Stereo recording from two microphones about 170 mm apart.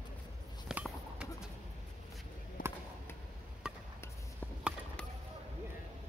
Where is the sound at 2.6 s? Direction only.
55° left (ahead or behind).